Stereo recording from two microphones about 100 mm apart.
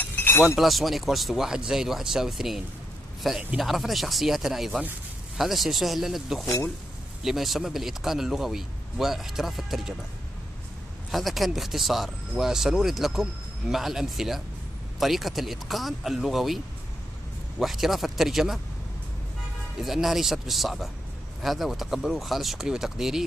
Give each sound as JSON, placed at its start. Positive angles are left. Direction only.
{"t": 0.0, "sound": "chink", "side_deg": 25}
{"t": 0.6, "sound": "speech", "side_deg": 0}
{"t": 11.1, "sound": "speech", "side_deg": 0}
{"t": 19.8, "sound": "speech", "side_deg": 0}